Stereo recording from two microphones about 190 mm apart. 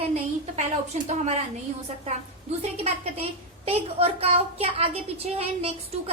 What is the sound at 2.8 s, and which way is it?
A woman's voice, 30° right (ahead or behind).